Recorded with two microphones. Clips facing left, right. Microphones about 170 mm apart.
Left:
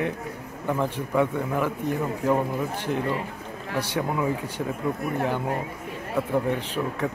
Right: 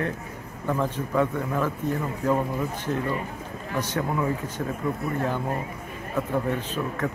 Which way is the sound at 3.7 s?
10° left (ahead or behind).